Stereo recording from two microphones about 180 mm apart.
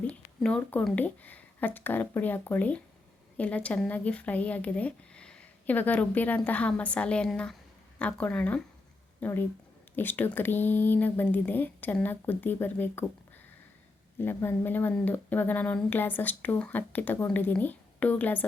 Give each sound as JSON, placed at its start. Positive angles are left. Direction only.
{"t": 0.1, "sound": "speech", "side_deg": 5}
{"t": 14.2, "sound": "speech", "side_deg": 10}